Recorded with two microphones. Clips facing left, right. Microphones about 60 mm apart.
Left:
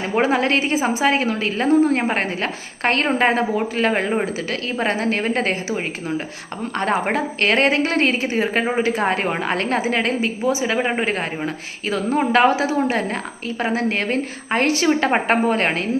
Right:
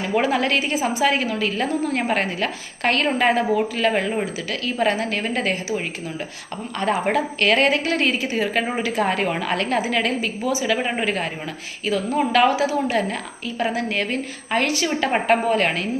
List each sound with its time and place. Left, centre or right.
0.0 s a woman's voice: left
10.8 s speech: centre
11.0 s a woman's voice: left